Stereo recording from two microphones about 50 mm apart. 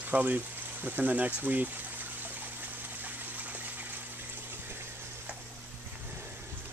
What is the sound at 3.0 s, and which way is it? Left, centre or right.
Water, right.